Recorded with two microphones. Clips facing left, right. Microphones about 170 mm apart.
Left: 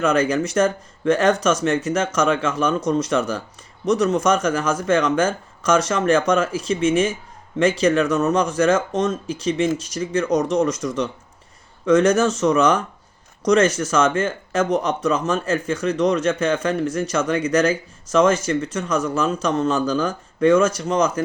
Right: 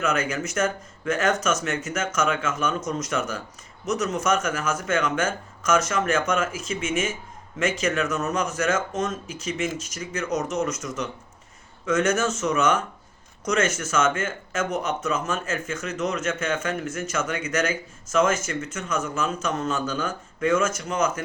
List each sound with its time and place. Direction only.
0.0 s speech: 30° left (ahead or behind)